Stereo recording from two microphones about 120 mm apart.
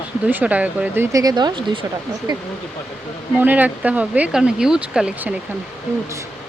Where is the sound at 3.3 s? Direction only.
15° right (ahead or behind).